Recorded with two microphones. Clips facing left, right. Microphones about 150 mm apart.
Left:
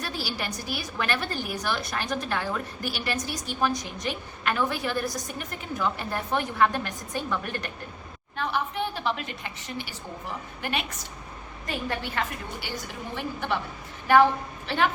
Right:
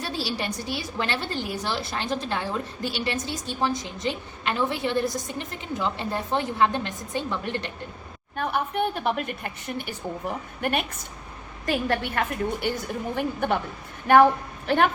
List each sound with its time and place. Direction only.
0.0 s a woman's voice: 30° right (ahead or behind)
8.4 s a woman's voice: 55° right (ahead or behind)
11.6 s a woman's voice: 70° right (ahead or behind); by 13.6 s 50° right (ahead or behind)
14.7 s a woman's voice: 50° right (ahead or behind)